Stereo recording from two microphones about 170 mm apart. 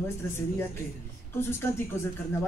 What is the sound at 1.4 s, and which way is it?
Speech, 15° left (ahead or behind).